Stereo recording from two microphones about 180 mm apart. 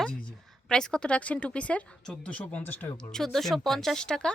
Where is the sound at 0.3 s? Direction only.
5° left (ahead or behind).